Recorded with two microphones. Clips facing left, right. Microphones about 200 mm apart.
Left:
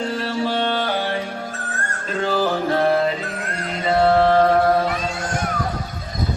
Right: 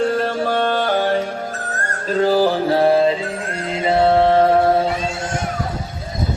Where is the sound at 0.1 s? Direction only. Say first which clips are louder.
Right 4 dB; 50° right (ahead or behind); by 5.4 s 25° right (ahead or behind).